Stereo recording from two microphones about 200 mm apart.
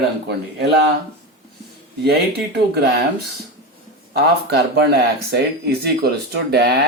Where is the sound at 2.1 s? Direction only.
50° right (ahead or behind).